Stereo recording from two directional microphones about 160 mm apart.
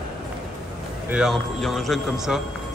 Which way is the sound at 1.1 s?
Centre (ahead or behind).